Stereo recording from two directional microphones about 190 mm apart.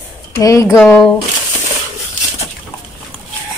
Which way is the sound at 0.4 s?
15° left (ahead or behind).